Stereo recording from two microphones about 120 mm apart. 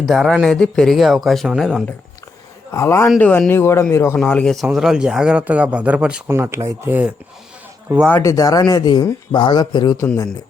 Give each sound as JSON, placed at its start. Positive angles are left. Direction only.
{"t": 0.0, "sound": "speech", "side_deg": 0}
{"t": 2.7, "sound": "a man's voice", "side_deg": 20}
{"t": 3.2, "sound": "a man's voice", "side_deg": 10}
{"t": 4.2, "sound": "speech", "side_deg": 10}
{"t": 4.5, "sound": "speech", "side_deg": 0}
{"t": 6.3, "sound": "speech", "side_deg": -20}
{"t": 8.2, "sound": "speech", "side_deg": 30}